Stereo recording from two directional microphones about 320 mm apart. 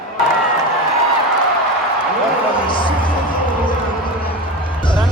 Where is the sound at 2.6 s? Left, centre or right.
Centre.